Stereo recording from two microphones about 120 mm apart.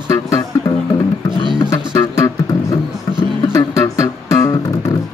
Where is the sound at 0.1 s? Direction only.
30° left (ahead or behind).